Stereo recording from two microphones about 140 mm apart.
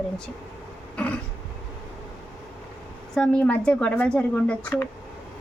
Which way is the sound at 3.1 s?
5° left (ahead or behind).